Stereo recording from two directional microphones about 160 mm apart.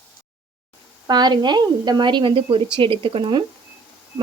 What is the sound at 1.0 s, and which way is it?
A woman's voice, 25° right (ahead or behind).